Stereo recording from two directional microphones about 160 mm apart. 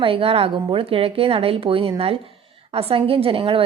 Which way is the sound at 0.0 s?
35° right (ahead or behind).